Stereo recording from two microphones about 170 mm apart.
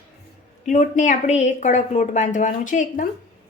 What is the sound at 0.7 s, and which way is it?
A woman's voice, 45° left (ahead or behind).